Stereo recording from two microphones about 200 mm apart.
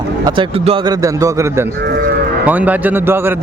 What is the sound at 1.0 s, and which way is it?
Speech, 15° right (ahead or behind).